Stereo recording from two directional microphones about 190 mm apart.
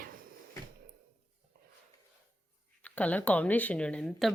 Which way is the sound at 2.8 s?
5° left (ahead or behind).